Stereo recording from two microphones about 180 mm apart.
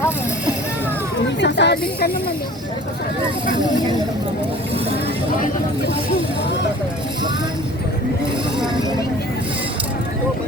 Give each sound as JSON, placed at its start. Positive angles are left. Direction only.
{"t": 1.4, "sound": "speech", "side_deg": 75}